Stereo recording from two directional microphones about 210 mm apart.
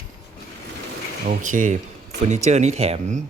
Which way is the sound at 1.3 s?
40° right (ahead or behind).